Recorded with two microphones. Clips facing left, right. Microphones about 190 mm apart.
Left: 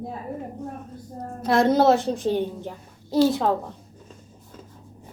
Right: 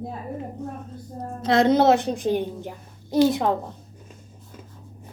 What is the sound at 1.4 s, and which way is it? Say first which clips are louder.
A woman's voice: right 1 dB; 20° right (ahead or behind).